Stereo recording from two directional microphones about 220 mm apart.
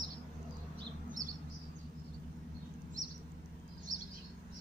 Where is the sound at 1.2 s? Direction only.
35° right (ahead or behind).